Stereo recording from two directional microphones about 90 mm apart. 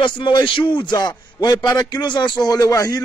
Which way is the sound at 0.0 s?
60° left (ahead or behind).